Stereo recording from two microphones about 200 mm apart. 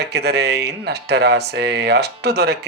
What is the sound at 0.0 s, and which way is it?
Speech, 55° right (ahead or behind).